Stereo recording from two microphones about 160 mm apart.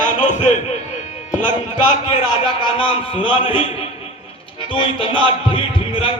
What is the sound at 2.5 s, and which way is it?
A man's voice, 30° left (ahead or behind).